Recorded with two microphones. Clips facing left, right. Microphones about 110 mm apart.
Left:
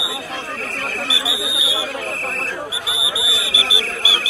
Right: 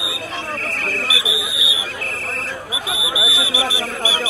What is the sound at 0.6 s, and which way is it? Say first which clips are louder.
Alarm: right 1 dB; centre (ahead or behind).